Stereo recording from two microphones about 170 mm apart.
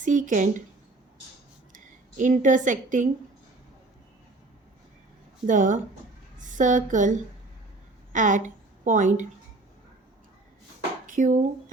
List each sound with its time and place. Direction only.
0.0 s speech: 50° right (ahead or behind)
1.7 s speech: 50° right (ahead or behind)
5.5 s a woman's voice: 50° right (ahead or behind)
8.1 s a woman's voice: 45° right (ahead or behind)
11.0 s a sound: 50° right (ahead or behind)